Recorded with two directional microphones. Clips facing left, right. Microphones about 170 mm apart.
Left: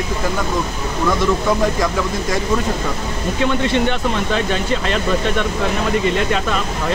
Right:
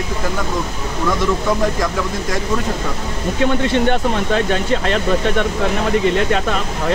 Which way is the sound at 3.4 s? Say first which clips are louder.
Right 1 dB; 50° right (ahead or behind).